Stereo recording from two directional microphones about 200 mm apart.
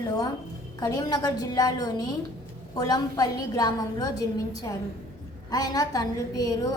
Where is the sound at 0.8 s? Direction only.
15° left (ahead or behind).